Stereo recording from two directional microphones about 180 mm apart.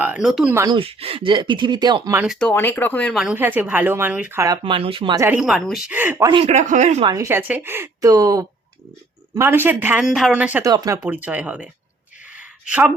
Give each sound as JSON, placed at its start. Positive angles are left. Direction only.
{"t": 0.0, "sound": "speech", "side_deg": -5}
{"t": 0.5, "sound": "speech", "side_deg": -20}
{"t": 0.8, "sound": "speech", "side_deg": -30}
{"t": 2.2, "sound": "speech", "side_deg": 0}
{"t": 3.2, "sound": "speech", "side_deg": -10}
{"t": 5.2, "sound": "a woman's voice", "side_deg": -5}
{"t": 5.9, "sound": "speech", "side_deg": -10}
{"t": 6.2, "sound": "speech", "side_deg": -25}
{"t": 6.5, "sound": "speech", "side_deg": -40}
{"t": 7.0, "sound": "speech", "side_deg": -20}
{"t": 10.7, "sound": "speech", "side_deg": -20}
{"t": 12.3, "sound": "a sound", "side_deg": -5}